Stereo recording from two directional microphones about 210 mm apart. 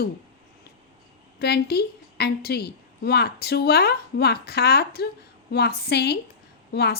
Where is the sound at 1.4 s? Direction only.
50° left (ahead or behind).